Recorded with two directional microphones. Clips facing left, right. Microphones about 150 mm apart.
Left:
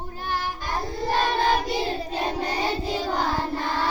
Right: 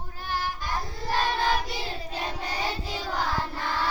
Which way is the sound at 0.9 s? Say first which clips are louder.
Left 7 dB; 25° left (ahead or behind).